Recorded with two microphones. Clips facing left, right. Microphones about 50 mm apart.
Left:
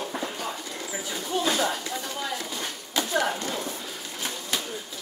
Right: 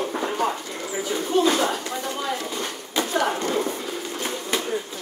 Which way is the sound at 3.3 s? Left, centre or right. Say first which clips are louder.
Right 7 dB; right.